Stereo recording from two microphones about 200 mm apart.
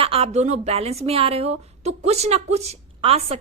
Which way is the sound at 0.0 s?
30° right (ahead or behind).